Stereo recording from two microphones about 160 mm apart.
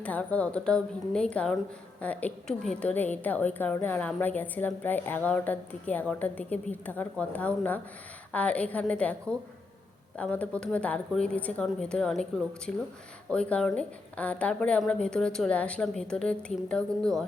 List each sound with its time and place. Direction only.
0.0 s a woman's voice: 10° left (ahead or behind)
10.2 s a woman's voice: 10° left (ahead or behind)